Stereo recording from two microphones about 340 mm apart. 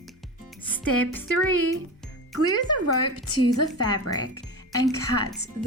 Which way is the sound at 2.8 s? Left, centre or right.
Left.